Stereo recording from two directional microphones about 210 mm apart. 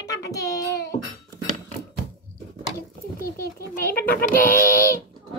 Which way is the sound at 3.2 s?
45° left (ahead or behind).